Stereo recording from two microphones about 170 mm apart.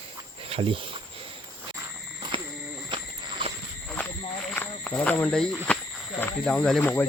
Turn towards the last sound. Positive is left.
turn(degrees=10)  # may be behind; listen again after turning